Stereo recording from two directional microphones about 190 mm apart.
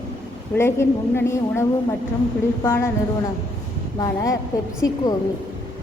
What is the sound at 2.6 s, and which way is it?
Speech, 15° left (ahead or behind).